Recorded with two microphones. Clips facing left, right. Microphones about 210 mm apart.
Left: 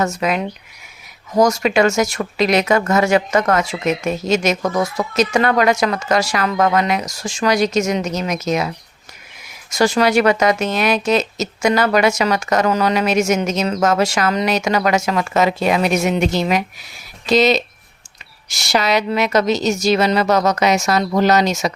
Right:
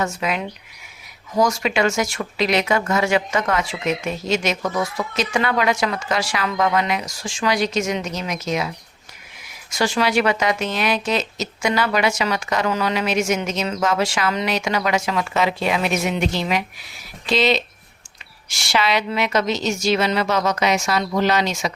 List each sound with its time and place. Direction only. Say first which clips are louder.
0.0 s speech: left 4 dB; 40° left (ahead or behind)
9.7 s a woman's voice: left 5 dB; 40° left (ahead or behind)